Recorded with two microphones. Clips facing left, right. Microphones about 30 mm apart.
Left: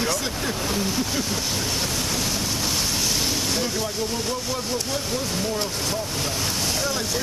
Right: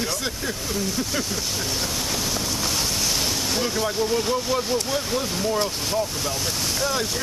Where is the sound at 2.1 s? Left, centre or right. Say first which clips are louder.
Even; centre.